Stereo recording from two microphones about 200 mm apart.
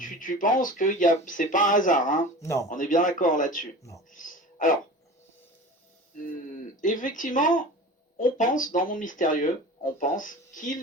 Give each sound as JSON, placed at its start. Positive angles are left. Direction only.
{"t": 0.0, "sound": "speech", "side_deg": 40}
{"t": 2.4, "sound": "speech", "side_deg": 15}
{"t": 2.6, "sound": "speech", "side_deg": 40}
{"t": 4.1, "sound": "a sound", "side_deg": 40}
{"t": 6.1, "sound": "speech", "side_deg": 40}